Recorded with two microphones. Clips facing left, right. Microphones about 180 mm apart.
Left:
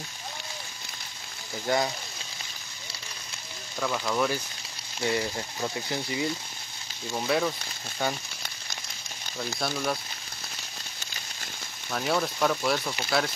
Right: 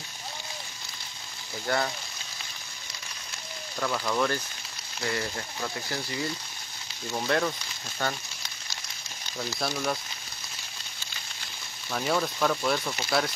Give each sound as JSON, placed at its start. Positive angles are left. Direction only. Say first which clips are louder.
{"t": 1.7, "sound": "speech", "louder": "left 2 dB", "side_deg": 15}
{"t": 3.8, "sound": "speech", "louder": "even", "side_deg": 5}
{"t": 5.0, "sound": "speech", "louder": "left 3 dB", "side_deg": 20}
{"t": 7.1, "sound": "speech", "louder": "left 1 dB", "side_deg": 0}
{"t": 9.6, "sound": "speech", "louder": "even", "side_deg": 0}
{"t": 11.9, "sound": "speech", "louder": "even", "side_deg": 0}